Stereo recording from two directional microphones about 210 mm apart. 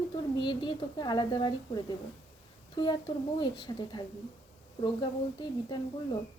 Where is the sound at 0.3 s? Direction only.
20° left (ahead or behind).